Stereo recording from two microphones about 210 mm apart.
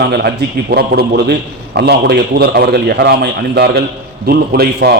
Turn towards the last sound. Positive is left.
turn(degrees=-50)  # may be behind; listen again after turning